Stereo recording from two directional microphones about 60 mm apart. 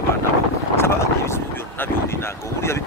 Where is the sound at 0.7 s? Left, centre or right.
Left.